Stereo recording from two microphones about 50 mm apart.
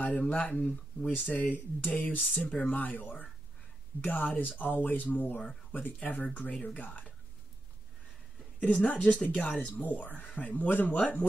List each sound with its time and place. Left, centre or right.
0.0 s speech: left
8.7 s speech: left